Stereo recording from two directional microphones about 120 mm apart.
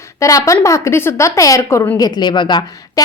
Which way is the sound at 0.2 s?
25° left (ahead or behind).